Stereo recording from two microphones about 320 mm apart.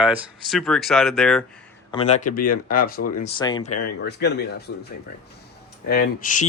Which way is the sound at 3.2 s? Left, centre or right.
Centre.